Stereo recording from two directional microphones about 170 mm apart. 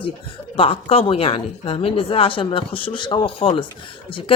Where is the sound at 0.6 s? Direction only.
35° left (ahead or behind).